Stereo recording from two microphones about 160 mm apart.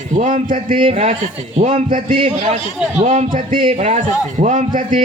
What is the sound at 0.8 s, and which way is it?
Speech, 40° right (ahead or behind).